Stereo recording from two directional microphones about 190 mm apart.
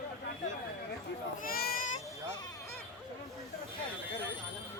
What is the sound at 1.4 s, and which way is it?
Speech, 50° left (ahead or behind).